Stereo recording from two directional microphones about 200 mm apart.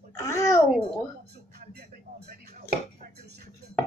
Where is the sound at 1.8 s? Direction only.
50° right (ahead or behind).